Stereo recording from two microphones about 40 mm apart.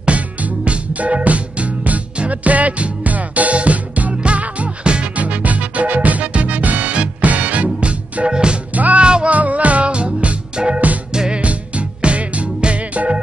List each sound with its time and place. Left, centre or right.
0.0 s music: right
8.3 s music: right
8.7 s music: right
9.0 s music: right
9.3 s music: right
11.4 s music: right